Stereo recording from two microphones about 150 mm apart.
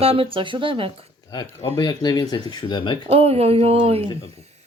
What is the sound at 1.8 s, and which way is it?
Speech, 30° left (ahead or behind).